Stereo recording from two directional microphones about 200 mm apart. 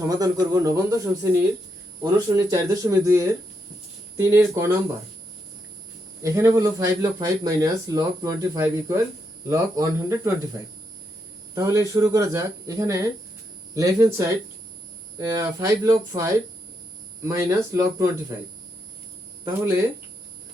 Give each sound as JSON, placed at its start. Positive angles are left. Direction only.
{"t": 0.1, "sound": "speech", "side_deg": -20}
{"t": 6.2, "sound": "speech", "side_deg": -15}
{"t": 11.5, "sound": "speech", "side_deg": -15}